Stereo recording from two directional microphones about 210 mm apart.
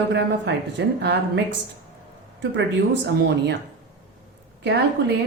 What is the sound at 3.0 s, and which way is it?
Speech, 55° right (ahead or behind).